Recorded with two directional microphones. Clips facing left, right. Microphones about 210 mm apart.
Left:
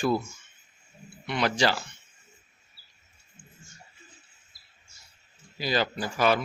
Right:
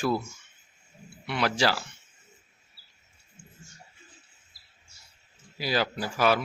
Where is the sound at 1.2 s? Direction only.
5° right (ahead or behind).